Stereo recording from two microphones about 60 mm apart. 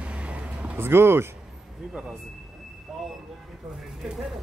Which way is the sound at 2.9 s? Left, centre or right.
Centre.